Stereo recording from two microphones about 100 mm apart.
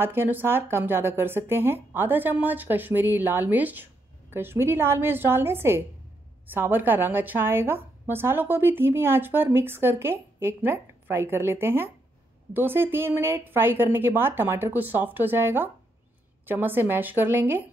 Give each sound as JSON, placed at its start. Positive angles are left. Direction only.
{"t": 0.0, "sound": "speech", "side_deg": -20}